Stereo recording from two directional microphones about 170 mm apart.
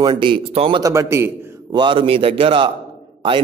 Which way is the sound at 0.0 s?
30° right (ahead or behind).